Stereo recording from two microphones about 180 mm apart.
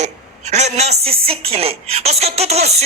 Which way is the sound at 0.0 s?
40° right (ahead or behind).